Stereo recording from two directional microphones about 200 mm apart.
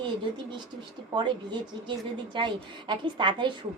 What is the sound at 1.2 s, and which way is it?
A woman's voice, 25° right (ahead or behind).